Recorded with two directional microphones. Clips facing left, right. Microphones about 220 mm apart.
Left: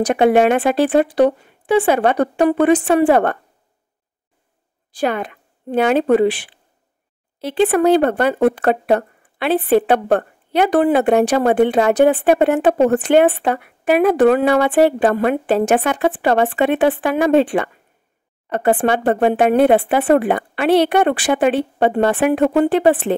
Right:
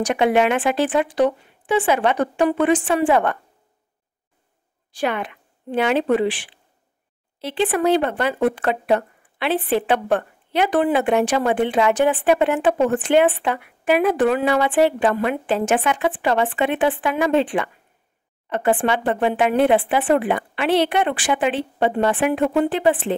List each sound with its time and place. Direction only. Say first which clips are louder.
0.0 s a woman's voice: left 5 dB; 45° left (ahead or behind)
1.0 s speech: left 4 dB; 60° left (ahead or behind)
2.0 s a woman's voice: left 4 dB; 45° left (ahead or behind)
5.0 s speech: left 3 dB; 40° left (ahead or behind)
7.4 s a woman's voice: left 5 dB; 50° left (ahead or behind)